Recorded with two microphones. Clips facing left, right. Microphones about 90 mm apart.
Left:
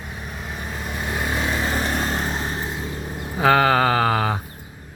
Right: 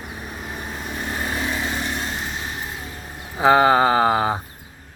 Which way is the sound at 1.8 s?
45° left (ahead or behind).